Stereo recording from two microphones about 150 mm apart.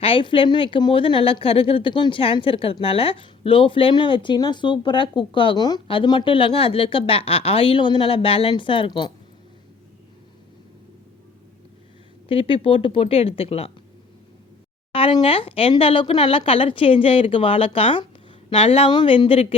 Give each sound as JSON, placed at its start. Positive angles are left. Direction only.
{"t": 0.0, "sound": "a woman's voice", "side_deg": 35}
{"t": 12.3, "sound": "a woman's voice", "side_deg": 40}
{"t": 14.9, "sound": "a woman's voice", "side_deg": 35}